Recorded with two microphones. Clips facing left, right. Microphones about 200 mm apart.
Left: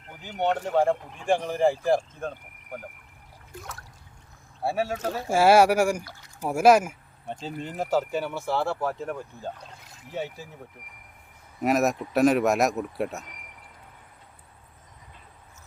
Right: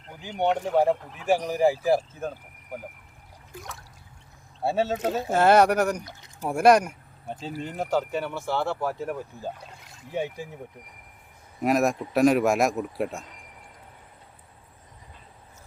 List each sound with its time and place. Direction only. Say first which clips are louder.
0.2 s speech: right 1 dB; 15° right (ahead or behind)
4.6 s speech: right 2 dB; 25° right (ahead or behind)
5.3 s speech: left 1 dB; 10° left (ahead or behind)
6.1 s boat: right 1 dB; 20° right (ahead or behind)
6.4 s speech: even; 5° left (ahead or behind); by 10.5 s 15° right (ahead or behind)
11.6 s speech: even; centre (ahead or behind)